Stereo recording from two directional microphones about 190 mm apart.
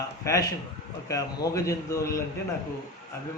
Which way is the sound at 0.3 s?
15° left (ahead or behind).